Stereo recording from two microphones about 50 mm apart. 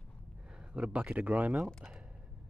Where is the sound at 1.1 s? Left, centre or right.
Right.